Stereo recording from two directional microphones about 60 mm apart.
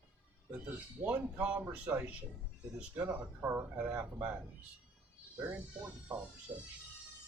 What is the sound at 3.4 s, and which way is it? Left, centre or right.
Speech, right.